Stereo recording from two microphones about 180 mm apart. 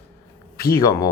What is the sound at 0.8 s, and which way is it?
Speech, 20° left (ahead or behind).